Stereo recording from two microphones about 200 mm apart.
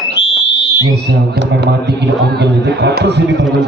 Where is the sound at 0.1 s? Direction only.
60° left (ahead or behind).